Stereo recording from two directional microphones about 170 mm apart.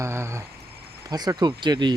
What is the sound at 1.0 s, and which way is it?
Speech, 20° right (ahead or behind).